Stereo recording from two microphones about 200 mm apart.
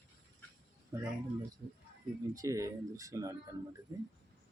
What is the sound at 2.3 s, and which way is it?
Speech, 15° right (ahead or behind).